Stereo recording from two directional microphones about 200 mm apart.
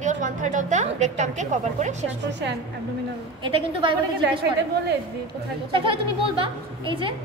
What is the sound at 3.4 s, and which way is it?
Speech, 25° right (ahead or behind).